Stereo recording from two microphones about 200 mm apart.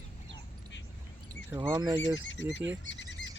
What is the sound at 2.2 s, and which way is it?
Speech, 70° left (ahead or behind).